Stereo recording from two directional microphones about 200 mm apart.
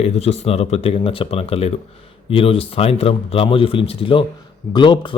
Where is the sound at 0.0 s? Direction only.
30° left (ahead or behind).